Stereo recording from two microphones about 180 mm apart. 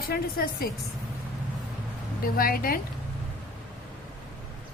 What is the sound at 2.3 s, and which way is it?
Speech, 55° left (ahead or behind).